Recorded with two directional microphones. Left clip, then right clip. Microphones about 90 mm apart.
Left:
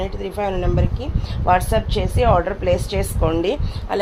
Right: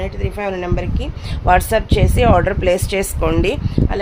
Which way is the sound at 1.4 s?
85° right.